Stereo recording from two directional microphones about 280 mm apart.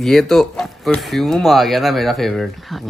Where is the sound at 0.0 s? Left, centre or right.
Centre.